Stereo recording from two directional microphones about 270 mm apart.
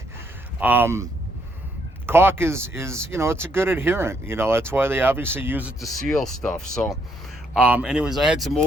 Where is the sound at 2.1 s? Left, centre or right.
Centre.